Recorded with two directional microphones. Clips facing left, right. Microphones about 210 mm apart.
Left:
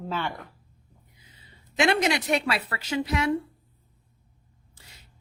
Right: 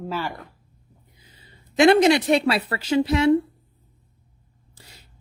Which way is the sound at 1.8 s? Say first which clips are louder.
Right 8 dB; 35° right (ahead or behind).